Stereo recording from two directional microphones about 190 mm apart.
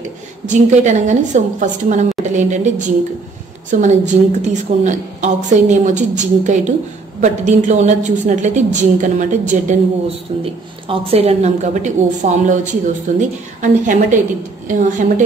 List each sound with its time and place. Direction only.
0.5 s a woman's voice: 40° right (ahead or behind)
3.7 s a woman's voice: 40° right (ahead or behind)